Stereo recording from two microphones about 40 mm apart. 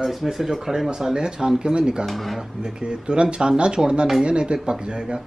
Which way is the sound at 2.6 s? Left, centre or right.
Right.